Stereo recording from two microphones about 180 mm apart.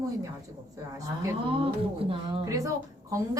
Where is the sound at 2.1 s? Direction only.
25° right (ahead or behind).